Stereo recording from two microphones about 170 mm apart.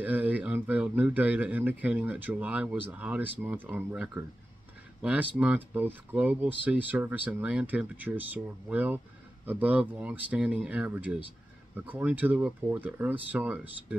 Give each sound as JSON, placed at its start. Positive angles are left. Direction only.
{"t": 0.0, "sound": "speech", "side_deg": -10}